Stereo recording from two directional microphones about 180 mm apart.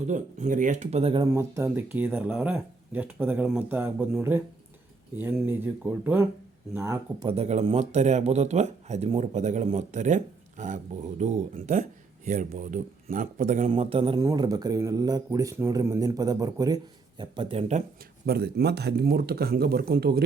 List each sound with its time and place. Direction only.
0.1 s speech: 45° right (ahead or behind)
1.3 s speech: 15° right (ahead or behind)
7.3 s speech: 35° right (ahead or behind)
13.7 s speech: 30° right (ahead or behind)
14.2 s a man's voice: 20° right (ahead or behind); by 17.8 s 35° right (ahead or behind)
18.3 s speech: 60° right (ahead or behind)